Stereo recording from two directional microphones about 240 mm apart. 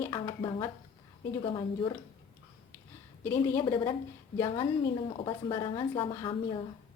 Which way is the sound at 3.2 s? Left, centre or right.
Centre.